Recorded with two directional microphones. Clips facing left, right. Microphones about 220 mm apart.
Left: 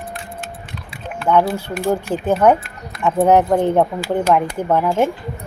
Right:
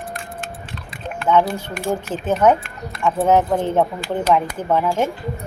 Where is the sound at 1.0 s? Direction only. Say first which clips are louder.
Left 1 dB; 10° left (ahead or behind).